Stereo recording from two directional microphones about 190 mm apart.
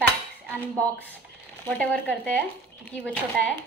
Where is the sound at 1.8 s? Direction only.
5° left (ahead or behind).